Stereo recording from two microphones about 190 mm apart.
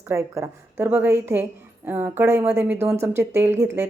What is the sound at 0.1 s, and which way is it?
A woman's voice, 15° right (ahead or behind).